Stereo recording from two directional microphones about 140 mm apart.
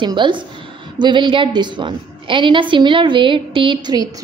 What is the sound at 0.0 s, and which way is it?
A woman's voice, 35° right (ahead or behind).